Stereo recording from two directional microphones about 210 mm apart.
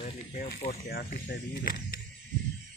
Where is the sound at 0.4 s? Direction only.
50° left (ahead or behind).